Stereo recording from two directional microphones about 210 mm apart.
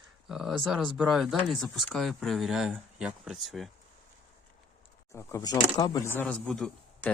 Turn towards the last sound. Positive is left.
turn(degrees=5)  # may be behind; listen again after turning